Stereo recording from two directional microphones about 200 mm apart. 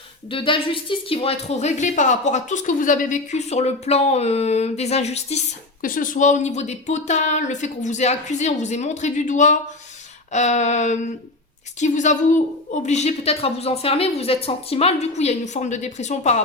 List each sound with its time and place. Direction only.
0.3 s a woman's voice: 25° left (ahead or behind)
5.8 s a woman's voice: 45° left (ahead or behind)